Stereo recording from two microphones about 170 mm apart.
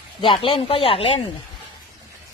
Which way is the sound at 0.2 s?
30° left (ahead or behind).